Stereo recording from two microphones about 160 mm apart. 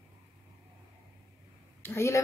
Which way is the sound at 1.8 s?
15° left (ahead or behind).